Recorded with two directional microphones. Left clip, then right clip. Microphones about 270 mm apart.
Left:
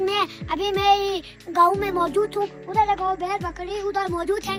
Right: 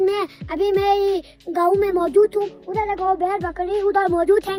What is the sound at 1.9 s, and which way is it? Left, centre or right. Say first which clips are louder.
A child's voice: right 5 dB; centre.